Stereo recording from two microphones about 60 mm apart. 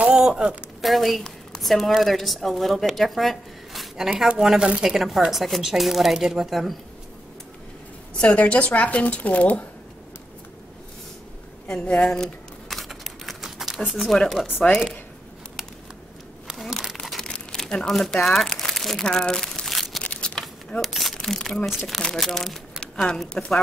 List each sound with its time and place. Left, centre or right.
0.1 s speech: centre
0.7 s a woman's voice: centre
8.1 s speech: centre
11.6 s speech: centre
12.6 s a sound: centre
14.7 s speech: centre
16.4 s crumpling: centre
17.2 s crumpling: centre
20.0 s a sound: centre
20.8 s a sound: centre
21.2 s speech: centre
21.6 s a woman's voice: centre